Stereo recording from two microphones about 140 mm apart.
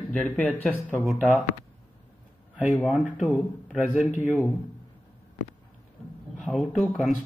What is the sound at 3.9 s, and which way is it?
Speech, 60° left (ahead or behind).